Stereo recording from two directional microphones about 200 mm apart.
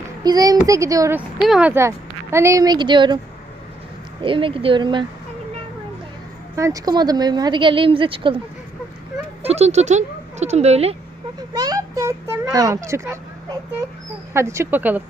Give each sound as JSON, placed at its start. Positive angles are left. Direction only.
{"t": 0.2, "sound": "a woman's voice", "side_deg": -20}
{"t": 4.2, "sound": "speech", "side_deg": -25}
{"t": 6.6, "sound": "speech", "side_deg": -15}
{"t": 9.4, "sound": "speech", "side_deg": -30}
{"t": 11.6, "sound": "a woman's voice", "side_deg": -15}